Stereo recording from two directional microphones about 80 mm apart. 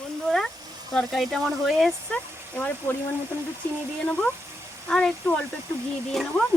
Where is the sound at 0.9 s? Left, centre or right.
Centre.